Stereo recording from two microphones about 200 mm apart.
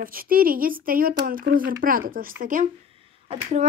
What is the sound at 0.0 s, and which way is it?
Speech, 45° right (ahead or behind).